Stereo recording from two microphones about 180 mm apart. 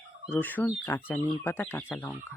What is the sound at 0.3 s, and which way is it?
Speech, 10° left (ahead or behind).